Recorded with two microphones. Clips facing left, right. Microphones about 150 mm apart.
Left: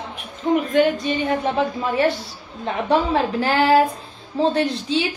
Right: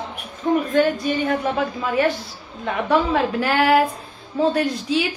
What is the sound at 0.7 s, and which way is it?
Speech, 20° left (ahead or behind).